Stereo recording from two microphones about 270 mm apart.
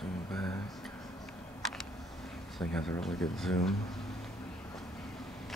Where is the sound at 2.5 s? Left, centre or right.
Centre.